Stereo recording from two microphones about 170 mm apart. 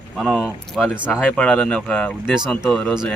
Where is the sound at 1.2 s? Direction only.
5° left (ahead or behind).